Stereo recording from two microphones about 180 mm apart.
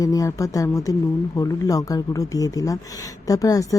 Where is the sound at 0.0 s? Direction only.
20° left (ahead or behind).